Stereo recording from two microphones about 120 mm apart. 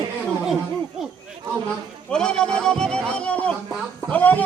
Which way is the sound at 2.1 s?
5° left (ahead or behind).